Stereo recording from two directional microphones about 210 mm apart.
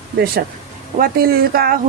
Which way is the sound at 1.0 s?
45° right (ahead or behind).